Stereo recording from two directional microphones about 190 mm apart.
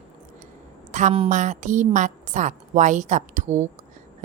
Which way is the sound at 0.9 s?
40° right (ahead or behind).